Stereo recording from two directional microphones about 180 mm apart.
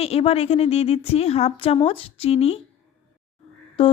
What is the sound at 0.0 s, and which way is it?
Speech, 35° left (ahead or behind).